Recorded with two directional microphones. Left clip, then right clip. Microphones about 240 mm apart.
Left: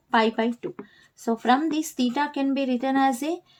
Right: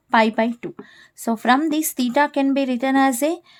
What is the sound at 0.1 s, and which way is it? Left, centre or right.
A woman's voice, right.